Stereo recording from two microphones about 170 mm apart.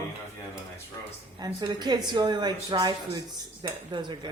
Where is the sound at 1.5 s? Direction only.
25° right (ahead or behind).